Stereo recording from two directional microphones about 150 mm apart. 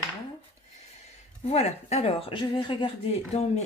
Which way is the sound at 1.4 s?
45° left (ahead or behind).